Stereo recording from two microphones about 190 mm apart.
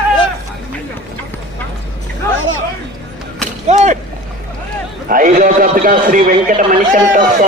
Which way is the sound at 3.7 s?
40° right (ahead or behind).